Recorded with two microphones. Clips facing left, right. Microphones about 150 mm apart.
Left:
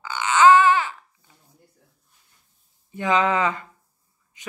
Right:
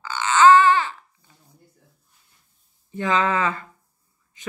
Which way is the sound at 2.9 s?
15° left (ahead or behind).